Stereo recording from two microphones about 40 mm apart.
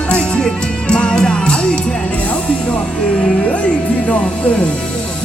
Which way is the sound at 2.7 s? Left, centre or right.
Left.